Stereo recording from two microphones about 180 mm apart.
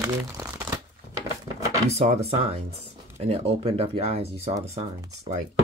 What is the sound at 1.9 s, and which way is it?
Speech, 35° right (ahead or behind).